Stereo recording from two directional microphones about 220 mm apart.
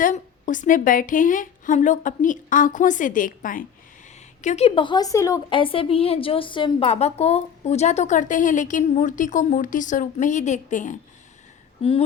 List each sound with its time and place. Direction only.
0.0 s a woman's voice: 35° left (ahead or behind)